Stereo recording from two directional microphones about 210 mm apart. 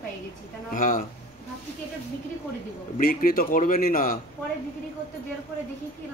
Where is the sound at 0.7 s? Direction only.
40° left (ahead or behind).